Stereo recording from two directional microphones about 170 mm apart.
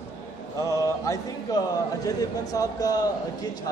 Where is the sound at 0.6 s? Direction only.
20° left (ahead or behind).